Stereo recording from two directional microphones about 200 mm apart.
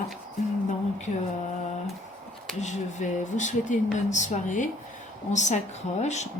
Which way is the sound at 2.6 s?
35° left (ahead or behind).